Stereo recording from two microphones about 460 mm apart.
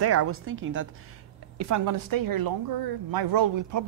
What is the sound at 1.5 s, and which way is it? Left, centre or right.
A woman's voice, right.